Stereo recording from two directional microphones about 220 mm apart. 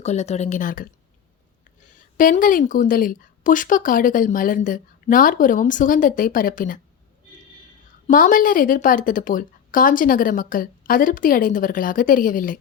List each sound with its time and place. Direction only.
0.0 s a woman's voice: 30° left (ahead or behind)
2.1 s a woman's voice: 35° left (ahead or behind)
8.0 s a woman's voice: 35° left (ahead or behind)